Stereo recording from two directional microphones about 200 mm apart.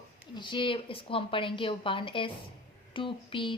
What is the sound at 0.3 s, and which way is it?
A woman's voice, 25° left (ahead or behind).